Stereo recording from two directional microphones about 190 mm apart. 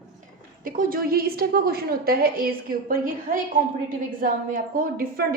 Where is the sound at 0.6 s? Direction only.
45° right (ahead or behind).